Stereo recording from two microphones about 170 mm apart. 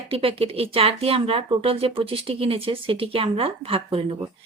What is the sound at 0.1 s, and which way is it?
Speech, 35° right (ahead or behind).